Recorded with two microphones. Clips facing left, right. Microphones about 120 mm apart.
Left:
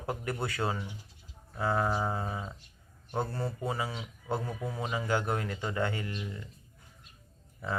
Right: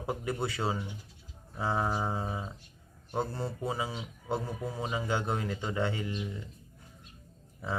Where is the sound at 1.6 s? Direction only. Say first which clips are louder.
Left 1 dB; 15° right (ahead or behind).